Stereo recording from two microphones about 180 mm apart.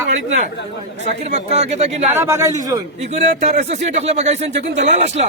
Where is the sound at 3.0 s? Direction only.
40° right (ahead or behind).